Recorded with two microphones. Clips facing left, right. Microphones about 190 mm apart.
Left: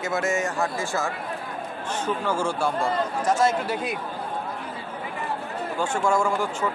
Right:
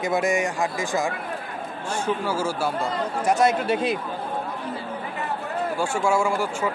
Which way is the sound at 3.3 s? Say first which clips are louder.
Right 3 dB; 20° right (ahead or behind).